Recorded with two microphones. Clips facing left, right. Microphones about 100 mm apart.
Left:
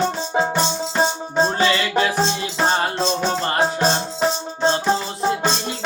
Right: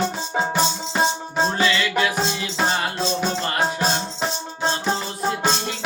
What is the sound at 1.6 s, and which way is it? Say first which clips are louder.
Music: left 2 dB; 30° left (ahead or behind).